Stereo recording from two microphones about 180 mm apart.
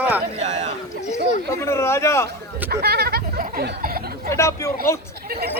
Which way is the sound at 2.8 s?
60° right (ahead or behind).